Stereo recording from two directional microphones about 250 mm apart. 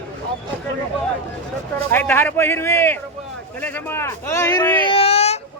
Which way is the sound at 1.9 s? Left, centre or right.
Centre.